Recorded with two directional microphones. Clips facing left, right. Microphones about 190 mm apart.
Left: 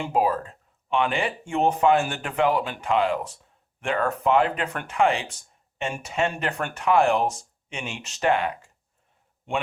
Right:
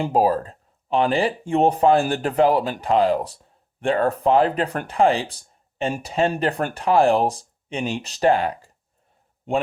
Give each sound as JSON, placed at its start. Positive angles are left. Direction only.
{"t": 0.0, "sound": "speech", "side_deg": -35}